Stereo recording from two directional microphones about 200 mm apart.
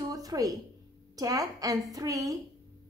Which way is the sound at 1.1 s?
20° right (ahead or behind).